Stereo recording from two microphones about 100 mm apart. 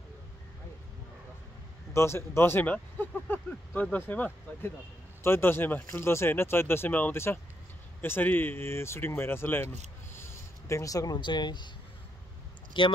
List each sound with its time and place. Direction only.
2.0 s speech: 25° left (ahead or behind)
10.1 s a sound: 25° left (ahead or behind)
11.1 s speech: 50° left (ahead or behind)
12.7 s speech: 55° left (ahead or behind)